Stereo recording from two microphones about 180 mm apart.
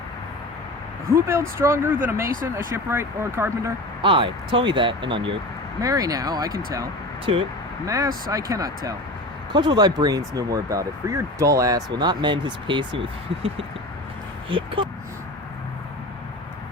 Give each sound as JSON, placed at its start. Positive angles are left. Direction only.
{"t": 1.1, "sound": "speech", "side_deg": -15}
{"t": 2.2, "sound": "speech", "side_deg": -50}
{"t": 2.6, "sound": "speech", "side_deg": -15}
{"t": 4.0, "sound": "speech", "side_deg": -30}
{"t": 7.3, "sound": "speech", "side_deg": -35}
{"t": 7.9, "sound": "speech", "side_deg": -20}
{"t": 14.5, "sound": "speech", "side_deg": -30}